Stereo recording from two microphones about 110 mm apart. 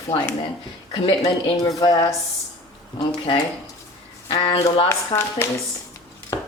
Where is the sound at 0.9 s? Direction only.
40° left (ahead or behind).